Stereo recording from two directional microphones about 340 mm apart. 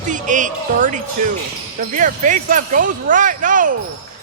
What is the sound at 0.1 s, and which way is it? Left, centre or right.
Speech, right.